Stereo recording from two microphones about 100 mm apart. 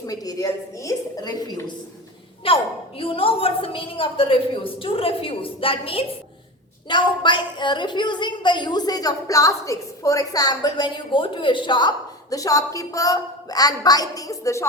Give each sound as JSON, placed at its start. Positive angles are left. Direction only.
{"t": 0.0, "sound": "a woman's voice", "side_deg": 35}
{"t": 2.4, "sound": "a woman's voice", "side_deg": 70}
{"t": 6.8, "sound": "a woman's voice", "side_deg": 50}